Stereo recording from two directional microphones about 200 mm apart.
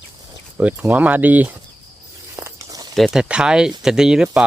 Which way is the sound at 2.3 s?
15° right (ahead or behind).